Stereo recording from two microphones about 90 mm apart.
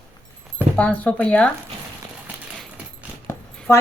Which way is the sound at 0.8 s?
15° left (ahead or behind).